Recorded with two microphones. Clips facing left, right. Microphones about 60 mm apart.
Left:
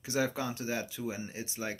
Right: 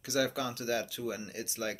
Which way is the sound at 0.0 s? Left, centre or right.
Left.